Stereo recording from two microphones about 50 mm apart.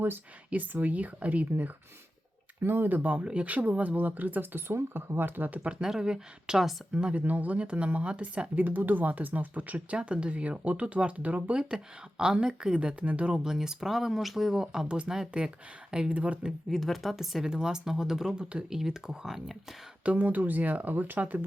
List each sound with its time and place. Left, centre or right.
0.5 s speech: right
2.6 s speech: right
4.7 s speech: right
5.8 s speech: centre
6.9 s speech: right
8.5 s speech: right
16.6 s speech: centre
20.1 s speech: right